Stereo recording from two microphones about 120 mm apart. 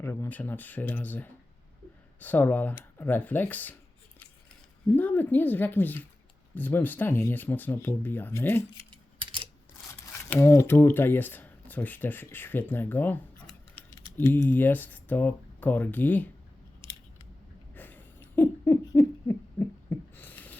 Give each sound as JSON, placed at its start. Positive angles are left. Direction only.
{"t": 0.0, "sound": "speech", "side_deg": 20}
{"t": 4.9, "sound": "speech", "side_deg": 15}
{"t": 9.2, "sound": "a sound", "side_deg": -45}
{"t": 10.1, "sound": "speech", "side_deg": 20}
{"t": 17.7, "sound": "owl", "side_deg": 15}